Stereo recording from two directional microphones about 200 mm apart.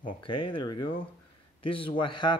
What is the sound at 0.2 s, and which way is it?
A man's voice, 25° left (ahead or behind).